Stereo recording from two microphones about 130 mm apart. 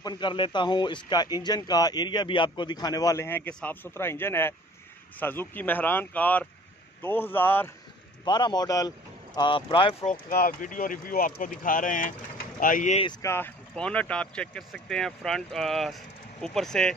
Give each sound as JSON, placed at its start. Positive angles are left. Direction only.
{"t": 0.0, "sound": "speech", "side_deg": 35}
{"t": 8.3, "sound": "speech", "side_deg": 35}
{"t": 10.0, "sound": "speech", "side_deg": 90}
{"t": 13.2, "sound": "speech", "side_deg": 20}
{"t": 13.7, "sound": "speech", "side_deg": 10}